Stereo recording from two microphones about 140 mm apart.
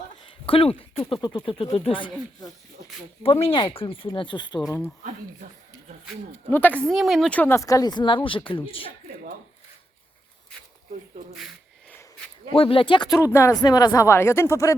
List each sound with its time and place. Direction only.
0.3 s speech: 40° left (ahead or behind)
6.5 s speech: 15° left (ahead or behind)
6.8 s speech: centre (ahead or behind); by 8.9 s 40° left (ahead or behind)
12.5 s speech: 40° left (ahead or behind)
13.1 s speech: 20° left (ahead or behind)